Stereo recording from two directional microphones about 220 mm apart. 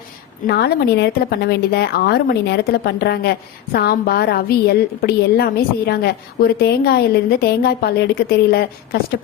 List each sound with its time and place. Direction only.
0.4 s a woman's voice: 45° left (ahead or behind)